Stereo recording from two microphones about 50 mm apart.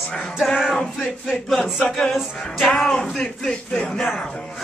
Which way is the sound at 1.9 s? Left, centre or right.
Centre.